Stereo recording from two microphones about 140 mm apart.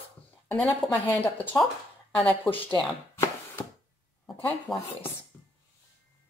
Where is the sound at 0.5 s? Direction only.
10° left (ahead or behind).